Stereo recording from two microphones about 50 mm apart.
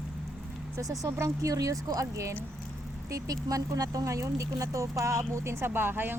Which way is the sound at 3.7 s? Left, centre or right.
Right.